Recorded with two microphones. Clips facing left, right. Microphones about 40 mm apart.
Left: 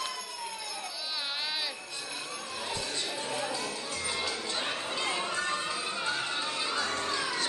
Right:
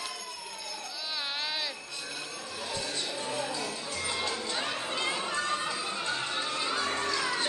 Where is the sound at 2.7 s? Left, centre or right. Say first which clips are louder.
Right 1 dB; left.